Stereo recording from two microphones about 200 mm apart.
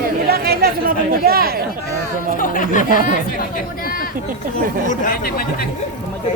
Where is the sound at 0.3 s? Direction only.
50° right (ahead or behind).